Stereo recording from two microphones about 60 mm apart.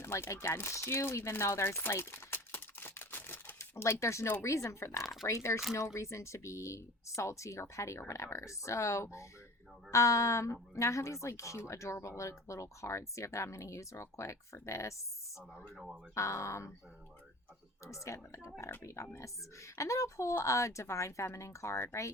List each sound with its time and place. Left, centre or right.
0.0 s chopping: left
3.6 s speech: left
16.1 s speech: left
17.9 s speech: left